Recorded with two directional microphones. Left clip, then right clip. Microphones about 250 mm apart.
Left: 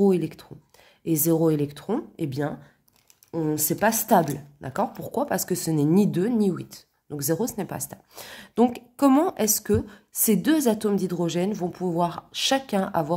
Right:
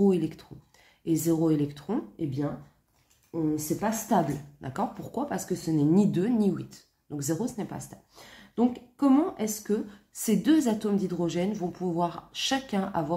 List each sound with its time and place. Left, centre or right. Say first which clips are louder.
0.0 s speech: left 4 dB; left
2.2 s a woman's voice: left 3 dB; left
4.6 s speech: left 7 dB; left